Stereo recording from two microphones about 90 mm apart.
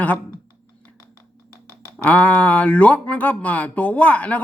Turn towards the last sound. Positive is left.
turn(degrees=15)  # may be behind; listen again after turning